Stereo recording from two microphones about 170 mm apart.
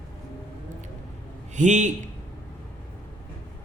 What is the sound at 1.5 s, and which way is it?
Speech, 45° right (ahead or behind).